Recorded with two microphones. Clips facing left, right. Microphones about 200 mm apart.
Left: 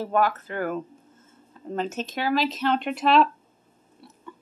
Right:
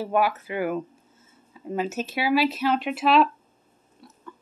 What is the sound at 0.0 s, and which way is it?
Speech, 10° right (ahead or behind).